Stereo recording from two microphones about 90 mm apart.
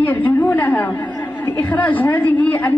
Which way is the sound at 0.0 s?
20° left (ahead or behind).